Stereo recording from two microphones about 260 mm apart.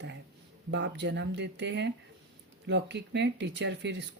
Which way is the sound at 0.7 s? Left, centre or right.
Right.